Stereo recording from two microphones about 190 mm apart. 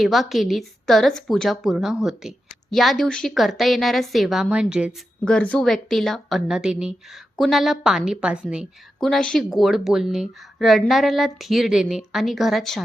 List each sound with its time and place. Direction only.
0.0 s a woman's voice: centre (ahead or behind)